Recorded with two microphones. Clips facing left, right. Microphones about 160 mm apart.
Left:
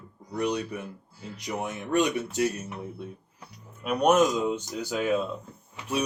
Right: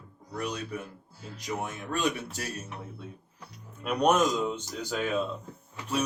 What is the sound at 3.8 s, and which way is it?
Speech, 10° left (ahead or behind).